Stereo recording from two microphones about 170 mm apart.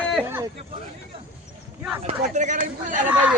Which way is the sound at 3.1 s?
5° right (ahead or behind).